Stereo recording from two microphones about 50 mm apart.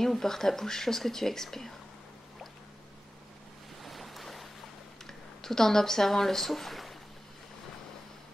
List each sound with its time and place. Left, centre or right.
0.0 s speech: centre
3.8 s waves: centre
5.0 s speech: centre